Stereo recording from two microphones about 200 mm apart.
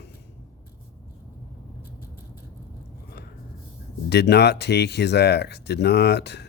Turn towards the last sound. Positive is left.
turn(degrees=55)  # may be behind; listen again after turning